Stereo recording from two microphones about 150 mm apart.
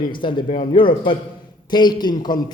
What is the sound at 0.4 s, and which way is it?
Speech, 60° left (ahead or behind).